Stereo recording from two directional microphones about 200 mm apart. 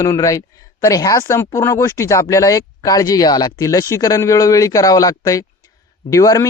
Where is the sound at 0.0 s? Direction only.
15° left (ahead or behind).